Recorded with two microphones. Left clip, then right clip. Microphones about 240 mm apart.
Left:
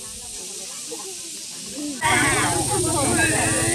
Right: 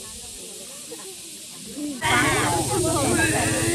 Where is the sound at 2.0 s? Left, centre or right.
Centre.